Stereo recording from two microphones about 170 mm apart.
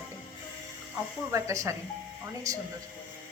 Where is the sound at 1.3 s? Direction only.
15° right (ahead or behind).